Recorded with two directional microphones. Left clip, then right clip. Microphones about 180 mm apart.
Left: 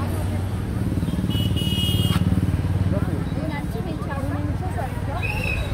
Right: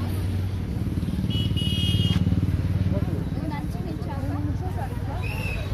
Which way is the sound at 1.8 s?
40° left (ahead or behind).